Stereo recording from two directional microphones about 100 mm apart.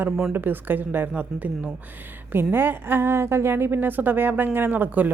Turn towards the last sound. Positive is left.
turn(degrees=-15)  # may be behind; listen again after turning